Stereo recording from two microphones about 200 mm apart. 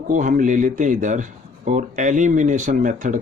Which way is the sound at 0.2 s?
40° right (ahead or behind).